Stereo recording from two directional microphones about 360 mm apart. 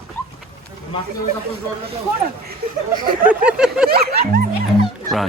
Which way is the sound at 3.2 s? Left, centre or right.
Centre.